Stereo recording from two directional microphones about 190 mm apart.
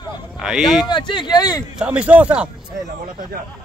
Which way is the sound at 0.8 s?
25° left (ahead or behind).